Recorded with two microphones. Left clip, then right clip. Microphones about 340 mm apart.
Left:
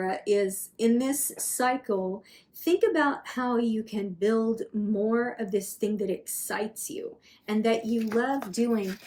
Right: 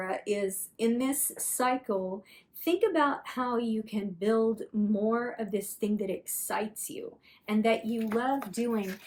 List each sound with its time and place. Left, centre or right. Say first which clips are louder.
0.0 s speech: left 5 dB; centre